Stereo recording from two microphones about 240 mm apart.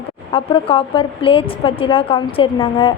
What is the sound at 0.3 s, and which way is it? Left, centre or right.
A woman's voice, left.